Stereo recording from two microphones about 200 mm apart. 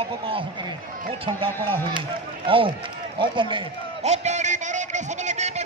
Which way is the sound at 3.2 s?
25° right (ahead or behind).